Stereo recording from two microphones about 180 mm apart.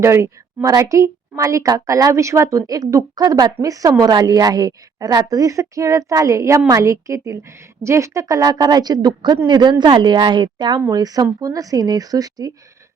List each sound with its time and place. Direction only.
0.0 s a woman's voice: 15° right (ahead or behind)